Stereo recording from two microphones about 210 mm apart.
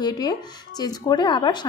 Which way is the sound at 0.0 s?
20° left (ahead or behind).